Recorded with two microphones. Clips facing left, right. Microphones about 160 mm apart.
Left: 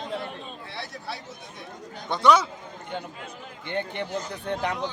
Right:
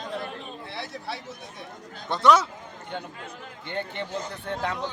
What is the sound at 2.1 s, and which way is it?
Speech, centre (ahead or behind).